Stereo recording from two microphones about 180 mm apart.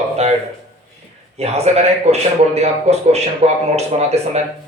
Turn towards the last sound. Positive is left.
turn(degrees=-35)  # may be behind; listen again after turning